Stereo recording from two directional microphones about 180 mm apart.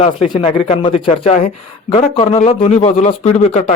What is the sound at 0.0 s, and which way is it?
A man's voice, 30° left (ahead or behind).